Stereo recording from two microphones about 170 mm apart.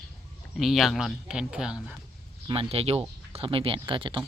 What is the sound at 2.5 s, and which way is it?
Speech, 35° right (ahead or behind).